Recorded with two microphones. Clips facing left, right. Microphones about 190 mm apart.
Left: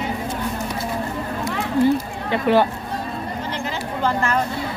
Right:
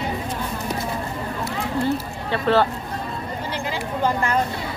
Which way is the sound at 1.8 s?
15° left (ahead or behind).